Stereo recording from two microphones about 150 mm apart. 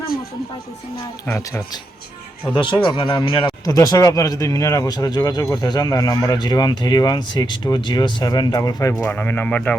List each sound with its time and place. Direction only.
1.3 s speech: 20° left (ahead or behind)
2.6 s speech: 35° left (ahead or behind)
3.7 s speech: 20° left (ahead or behind)